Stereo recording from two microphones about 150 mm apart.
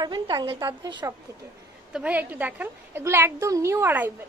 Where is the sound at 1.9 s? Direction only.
10° right (ahead or behind).